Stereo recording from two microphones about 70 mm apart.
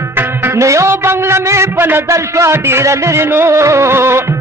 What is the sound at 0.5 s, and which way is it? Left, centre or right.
Music, right.